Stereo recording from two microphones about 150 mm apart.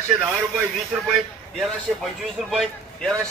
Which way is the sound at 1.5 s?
Centre (ahead or behind).